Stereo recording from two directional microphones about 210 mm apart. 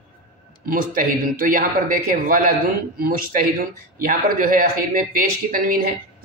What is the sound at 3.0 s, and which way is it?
Speech, 45° right (ahead or behind).